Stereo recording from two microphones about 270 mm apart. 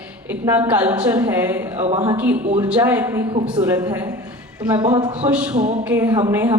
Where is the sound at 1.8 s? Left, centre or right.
Right.